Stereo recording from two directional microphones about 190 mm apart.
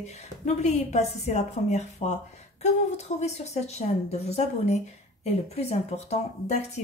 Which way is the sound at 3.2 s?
35° left (ahead or behind).